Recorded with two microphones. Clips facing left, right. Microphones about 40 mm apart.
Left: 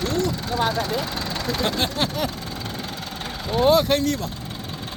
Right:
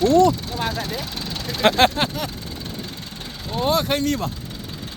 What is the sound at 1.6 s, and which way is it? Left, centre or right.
Speech, right.